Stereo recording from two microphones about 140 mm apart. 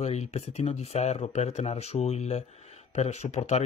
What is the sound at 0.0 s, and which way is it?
Speech, 50° left (ahead or behind).